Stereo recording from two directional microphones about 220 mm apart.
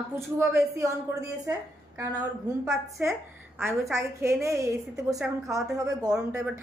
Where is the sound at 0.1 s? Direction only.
10° right (ahead or behind).